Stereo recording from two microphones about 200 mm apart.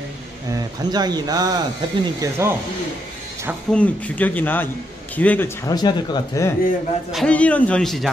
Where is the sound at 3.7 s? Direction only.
5° left (ahead or behind).